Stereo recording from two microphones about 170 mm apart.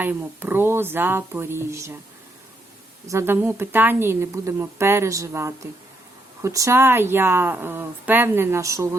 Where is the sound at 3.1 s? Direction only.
15° right (ahead or behind).